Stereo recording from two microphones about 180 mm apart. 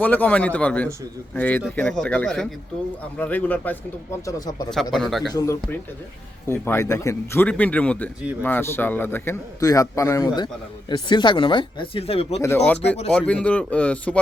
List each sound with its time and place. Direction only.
0.0 s speech: 10° left (ahead or behind)
4.7 s speech: centre (ahead or behind)
5.3 s a man's voice: 20° left (ahead or behind)
12.4 s speech: 10° left (ahead or behind)